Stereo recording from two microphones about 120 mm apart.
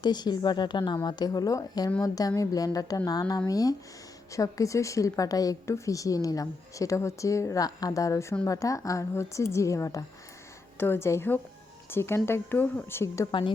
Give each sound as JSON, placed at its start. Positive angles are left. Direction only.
{"t": 0.0, "sound": "a woman's voice", "side_deg": 35}